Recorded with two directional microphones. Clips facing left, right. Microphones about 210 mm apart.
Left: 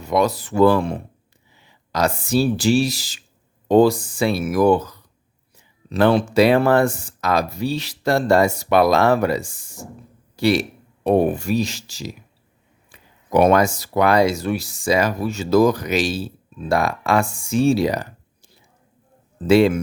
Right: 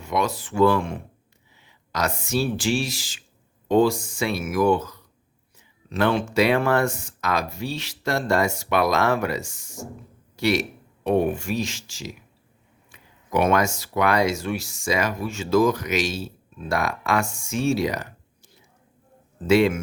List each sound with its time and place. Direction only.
0.0 s speech: 35° left (ahead or behind)